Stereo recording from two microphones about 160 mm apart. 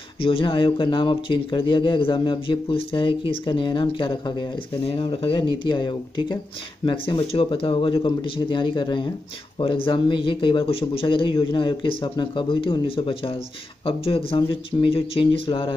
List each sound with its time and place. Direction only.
0.2 s speech: 35° left (ahead or behind)